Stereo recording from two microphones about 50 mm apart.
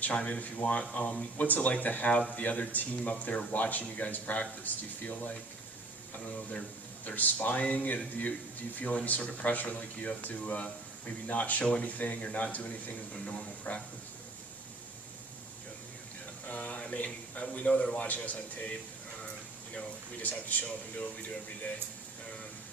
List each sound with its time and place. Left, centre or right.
0.0 s speech: left
16.5 s speech: left